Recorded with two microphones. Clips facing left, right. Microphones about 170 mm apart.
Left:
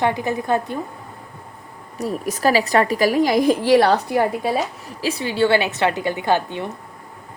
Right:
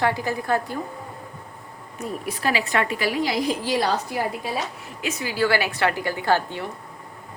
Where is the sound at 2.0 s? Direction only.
40° left (ahead or behind); by 4.6 s 55° left (ahead or behind).